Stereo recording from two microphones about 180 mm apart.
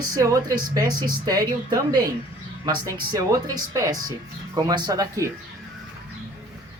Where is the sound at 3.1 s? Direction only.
20° right (ahead or behind).